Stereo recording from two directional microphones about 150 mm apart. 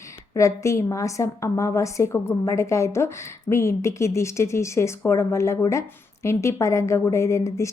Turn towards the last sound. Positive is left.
turn(degrees=20)  # may be behind; listen again after turning